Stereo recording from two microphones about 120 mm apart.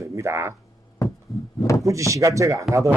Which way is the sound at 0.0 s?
25° right (ahead or behind).